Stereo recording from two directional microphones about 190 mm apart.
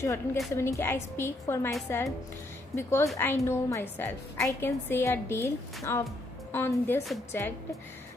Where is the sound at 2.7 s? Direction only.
15° left (ahead or behind).